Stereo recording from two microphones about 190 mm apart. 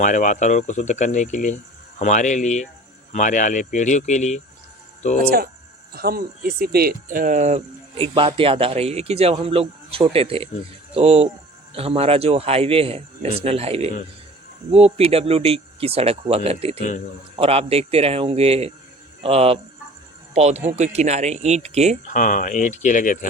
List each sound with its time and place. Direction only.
0.0 s speech: 40° left (ahead or behind)
5.9 s speech: 55° right (ahead or behind); by 21.9 s 35° right (ahead or behind)
22.0 s speech: 40° left (ahead or behind)